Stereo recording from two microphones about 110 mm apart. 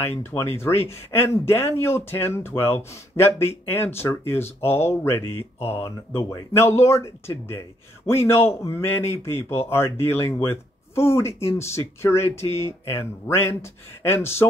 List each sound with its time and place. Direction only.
0.2 s speech: 20° left (ahead or behind)